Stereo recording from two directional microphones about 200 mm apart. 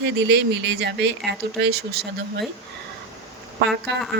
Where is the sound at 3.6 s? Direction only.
60° right (ahead or behind).